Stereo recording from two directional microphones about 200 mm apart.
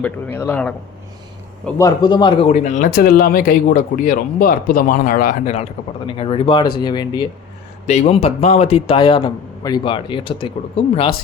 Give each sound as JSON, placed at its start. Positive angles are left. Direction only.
{"t": 0.0, "sound": "speech", "side_deg": 10}
{"t": 1.8, "sound": "a man's voice", "side_deg": 20}
{"t": 2.5, "sound": "speech", "side_deg": 35}
{"t": 6.1, "sound": "a man's voice", "side_deg": 25}
{"t": 7.9, "sound": "a man's voice", "side_deg": 35}